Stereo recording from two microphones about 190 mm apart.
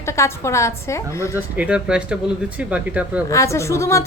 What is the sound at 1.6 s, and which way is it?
Speech, 5° right (ahead or behind).